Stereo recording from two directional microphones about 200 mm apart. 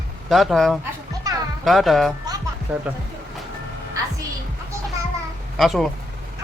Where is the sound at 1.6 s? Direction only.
Centre (ahead or behind).